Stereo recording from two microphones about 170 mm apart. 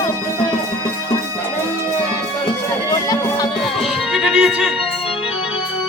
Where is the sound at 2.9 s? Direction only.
20° left (ahead or behind).